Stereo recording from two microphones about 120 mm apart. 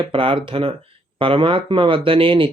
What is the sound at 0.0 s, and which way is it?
Speech, 45° right (ahead or behind).